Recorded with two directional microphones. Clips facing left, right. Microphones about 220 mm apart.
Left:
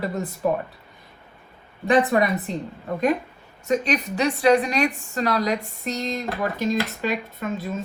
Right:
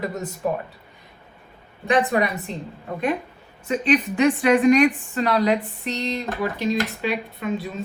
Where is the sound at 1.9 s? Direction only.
Centre (ahead or behind).